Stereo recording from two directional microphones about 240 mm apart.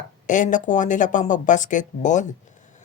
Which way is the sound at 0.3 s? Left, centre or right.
Left.